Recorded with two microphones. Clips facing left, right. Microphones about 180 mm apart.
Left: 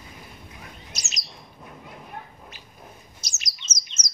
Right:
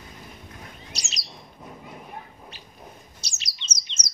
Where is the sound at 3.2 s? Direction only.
30° right (ahead or behind).